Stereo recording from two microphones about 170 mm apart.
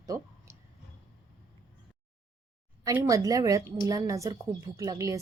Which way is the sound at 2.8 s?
20° right (ahead or behind).